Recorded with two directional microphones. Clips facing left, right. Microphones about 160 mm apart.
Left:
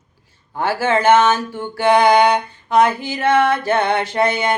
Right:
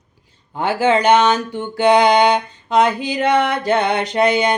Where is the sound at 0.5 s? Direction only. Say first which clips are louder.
Right 2 dB; 20° right (ahead or behind).